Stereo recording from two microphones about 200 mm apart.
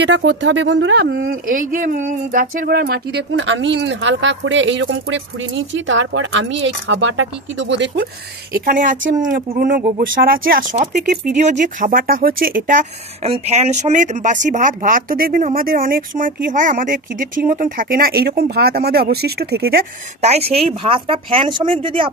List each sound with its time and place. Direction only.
0.0 s speech: 65° right (ahead or behind)
8.5 s speech: 45° right (ahead or behind)
20.2 s speech: 30° right (ahead or behind)